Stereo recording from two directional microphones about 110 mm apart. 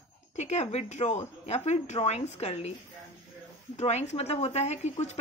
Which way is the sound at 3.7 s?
90° left.